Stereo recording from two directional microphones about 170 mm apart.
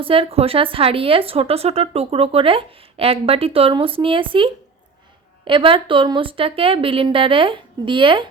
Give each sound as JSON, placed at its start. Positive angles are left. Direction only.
{"t": 0.0, "sound": "speech", "side_deg": -35}